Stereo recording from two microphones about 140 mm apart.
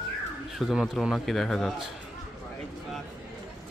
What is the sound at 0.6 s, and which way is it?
Speech, centre (ahead or behind).